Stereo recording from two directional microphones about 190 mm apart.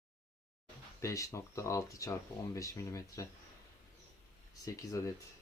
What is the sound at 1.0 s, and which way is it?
Speech, 15° left (ahead or behind).